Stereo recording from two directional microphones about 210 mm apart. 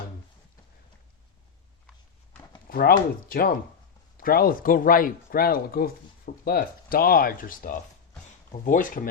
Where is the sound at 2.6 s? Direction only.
45° left (ahead or behind).